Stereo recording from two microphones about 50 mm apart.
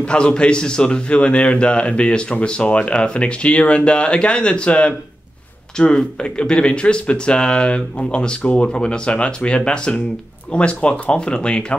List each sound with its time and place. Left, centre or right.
0.0 s speech: left